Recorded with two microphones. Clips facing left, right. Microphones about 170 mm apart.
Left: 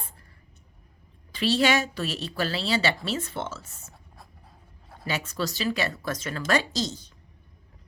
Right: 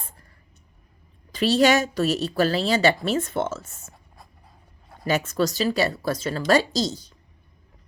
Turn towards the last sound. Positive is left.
turn(degrees=-35)  # may be behind; listen again after turning